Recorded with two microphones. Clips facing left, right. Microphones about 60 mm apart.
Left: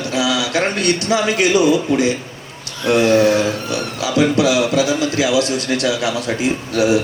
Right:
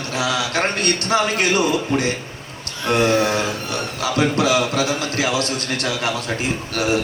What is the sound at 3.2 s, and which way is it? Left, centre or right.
A man's voice, right.